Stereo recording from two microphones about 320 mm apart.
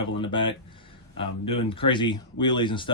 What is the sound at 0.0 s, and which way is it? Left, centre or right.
Speech, centre.